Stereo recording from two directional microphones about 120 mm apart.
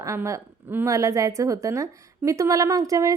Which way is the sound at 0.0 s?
25° right (ahead or behind).